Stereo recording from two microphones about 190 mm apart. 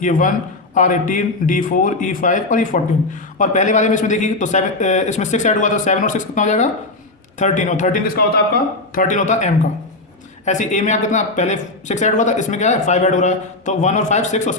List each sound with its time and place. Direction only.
0.0 s a man's voice: 45° left (ahead or behind)